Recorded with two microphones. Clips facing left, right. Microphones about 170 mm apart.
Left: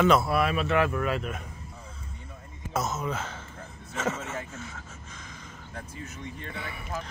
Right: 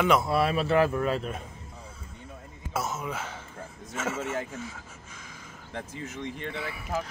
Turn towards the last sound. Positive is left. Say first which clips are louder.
# right 2 dB
turn(degrees=-5)  # may be behind; listen again after turning